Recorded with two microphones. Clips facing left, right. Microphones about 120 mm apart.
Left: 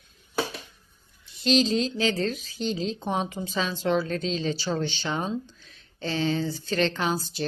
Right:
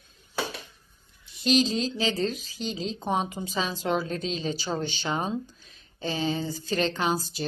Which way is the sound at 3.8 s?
15° right (ahead or behind).